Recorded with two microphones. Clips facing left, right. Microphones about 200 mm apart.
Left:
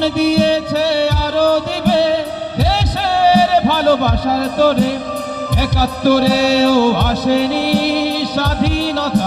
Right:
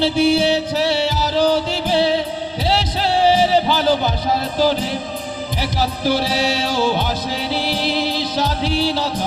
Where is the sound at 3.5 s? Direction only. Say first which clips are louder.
Left 4 dB; 60° left (ahead or behind).